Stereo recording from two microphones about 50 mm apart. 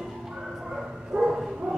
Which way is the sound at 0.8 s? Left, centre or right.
Centre.